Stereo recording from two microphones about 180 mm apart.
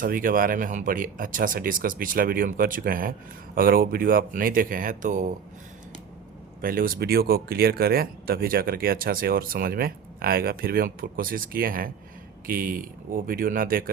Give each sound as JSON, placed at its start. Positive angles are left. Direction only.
{"t": 0.0, "sound": "speech", "side_deg": -50}
{"t": 6.6, "sound": "speech", "side_deg": -55}